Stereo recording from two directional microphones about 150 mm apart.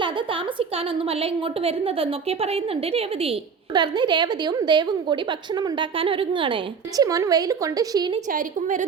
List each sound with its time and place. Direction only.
1.2 s a woman's voice: 40° right (ahead or behind)
3.8 s a woman's voice: 30° right (ahead or behind)
8.3 s a woman's voice: 60° right (ahead or behind)